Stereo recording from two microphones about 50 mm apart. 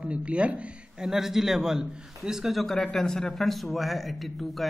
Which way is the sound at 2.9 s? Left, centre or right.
Centre.